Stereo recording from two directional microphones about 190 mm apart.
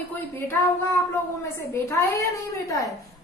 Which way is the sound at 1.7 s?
15° left (ahead or behind).